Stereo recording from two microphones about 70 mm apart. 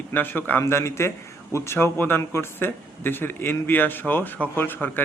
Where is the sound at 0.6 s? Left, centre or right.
Left.